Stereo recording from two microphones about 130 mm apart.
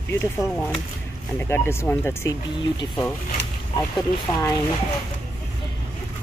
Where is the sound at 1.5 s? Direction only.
20° left (ahead or behind).